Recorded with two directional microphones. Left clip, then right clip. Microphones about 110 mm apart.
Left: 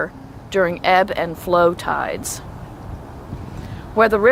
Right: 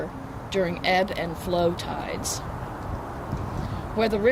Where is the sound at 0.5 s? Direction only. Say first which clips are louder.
Left 8 dB; 30° left (ahead or behind).